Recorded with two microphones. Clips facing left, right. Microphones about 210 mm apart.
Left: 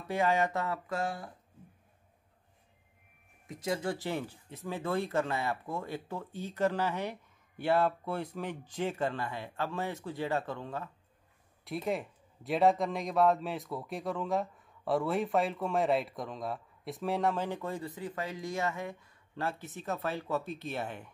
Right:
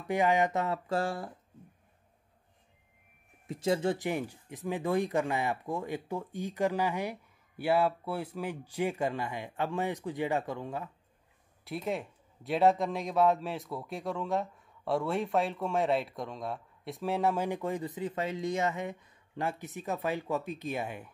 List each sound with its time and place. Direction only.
0.1 s speech: 15° right (ahead or behind)
3.4 s speech: 25° right (ahead or behind)
11.6 s speech: centre (ahead or behind)